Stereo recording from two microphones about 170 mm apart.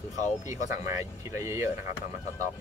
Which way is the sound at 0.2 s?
45° left (ahead or behind).